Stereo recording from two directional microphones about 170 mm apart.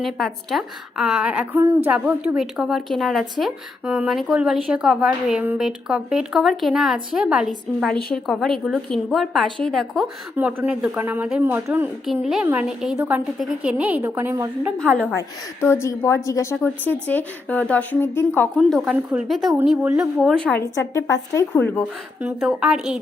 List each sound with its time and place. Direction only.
0.0 s speech: centre (ahead or behind)
10.3 s a woman's voice: 10° right (ahead or behind)
14.8 s a woman's voice: 5° left (ahead or behind)
18.5 s a woman's voice: centre (ahead or behind)
20.7 s a woman's voice: 20° left (ahead or behind)
22.2 s speech: 5° right (ahead or behind)